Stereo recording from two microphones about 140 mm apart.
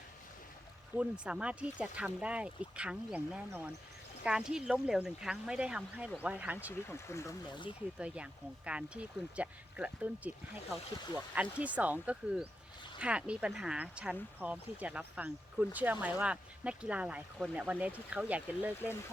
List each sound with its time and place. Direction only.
0.9 s speech: 10° right (ahead or behind)
6.9 s speech: 20° left (ahead or behind)
7.9 s speech: 10° right (ahead or behind)